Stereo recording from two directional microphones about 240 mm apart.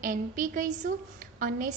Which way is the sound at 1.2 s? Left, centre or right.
Right.